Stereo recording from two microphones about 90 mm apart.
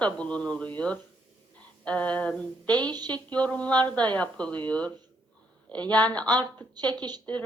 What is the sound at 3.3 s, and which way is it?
A woman's voice, 15° left (ahead or behind).